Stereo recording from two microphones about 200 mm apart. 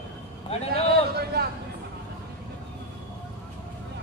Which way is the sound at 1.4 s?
50° right (ahead or behind).